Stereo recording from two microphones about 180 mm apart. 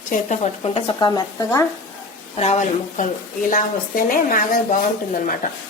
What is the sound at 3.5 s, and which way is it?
A woman's voice, 50° left (ahead or behind).